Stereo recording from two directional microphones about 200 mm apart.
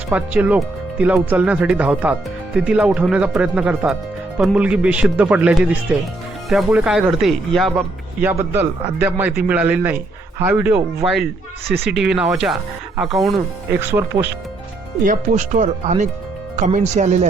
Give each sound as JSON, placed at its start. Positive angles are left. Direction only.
{"t": 0.1, "sound": "speech", "side_deg": -10}
{"t": 8.2, "sound": "speech", "side_deg": -10}
{"t": 13.7, "sound": "speech", "side_deg": -10}
{"t": 15.0, "sound": "speech", "side_deg": -40}